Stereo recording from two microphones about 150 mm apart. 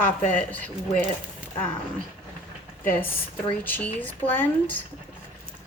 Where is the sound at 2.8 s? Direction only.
15° left (ahead or behind).